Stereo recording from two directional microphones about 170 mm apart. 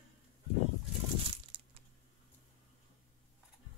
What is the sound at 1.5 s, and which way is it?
Crushing, 30° right (ahead or behind).